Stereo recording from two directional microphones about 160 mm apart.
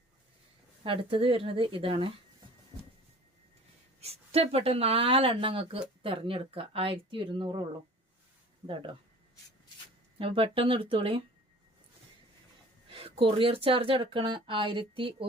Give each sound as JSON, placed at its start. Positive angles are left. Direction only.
{"t": 0.9, "sound": "speech", "side_deg": -35}
{"t": 4.0, "sound": "speech", "side_deg": -40}
{"t": 10.2, "sound": "speech", "side_deg": -35}
{"t": 12.9, "sound": "speech", "side_deg": -35}